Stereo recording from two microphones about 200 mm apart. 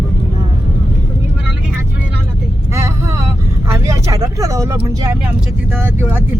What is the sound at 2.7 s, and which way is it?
Vehicle, 15° right (ahead or behind).